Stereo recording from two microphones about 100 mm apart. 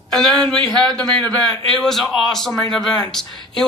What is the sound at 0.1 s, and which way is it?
Speech, 5° left (ahead or behind).